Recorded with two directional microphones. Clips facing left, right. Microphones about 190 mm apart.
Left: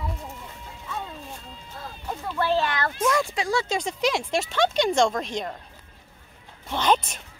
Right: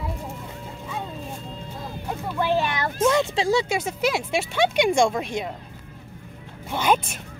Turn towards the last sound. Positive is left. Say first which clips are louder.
# right 1 dB
turn(degrees=-10)  # may be behind; listen again after turning